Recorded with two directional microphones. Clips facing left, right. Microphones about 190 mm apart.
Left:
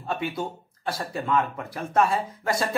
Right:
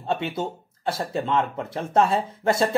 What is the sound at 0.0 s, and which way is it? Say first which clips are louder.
Speech: right 3 dB; 25° right (ahead or behind).